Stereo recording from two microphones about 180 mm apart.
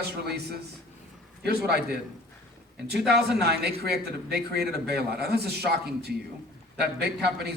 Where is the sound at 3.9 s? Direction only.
65° right (ahead or behind).